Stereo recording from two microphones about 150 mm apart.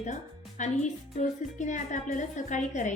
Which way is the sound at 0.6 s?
55° left (ahead or behind).